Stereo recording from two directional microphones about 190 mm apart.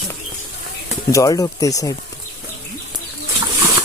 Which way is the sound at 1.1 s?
20° left (ahead or behind).